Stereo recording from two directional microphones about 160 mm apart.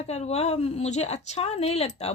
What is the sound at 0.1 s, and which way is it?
A woman's voice, 40° left (ahead or behind).